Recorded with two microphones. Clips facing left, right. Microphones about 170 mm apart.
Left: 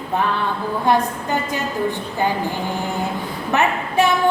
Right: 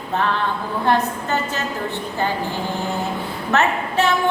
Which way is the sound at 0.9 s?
15° left (ahead or behind).